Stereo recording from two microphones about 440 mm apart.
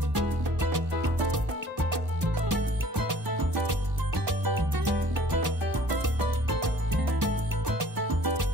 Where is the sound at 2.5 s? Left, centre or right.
Right.